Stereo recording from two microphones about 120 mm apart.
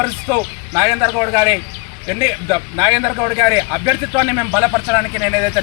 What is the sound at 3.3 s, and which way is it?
Speech, 25° right (ahead or behind).